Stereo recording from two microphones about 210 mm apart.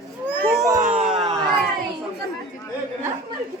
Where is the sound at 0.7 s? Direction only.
35° right (ahead or behind).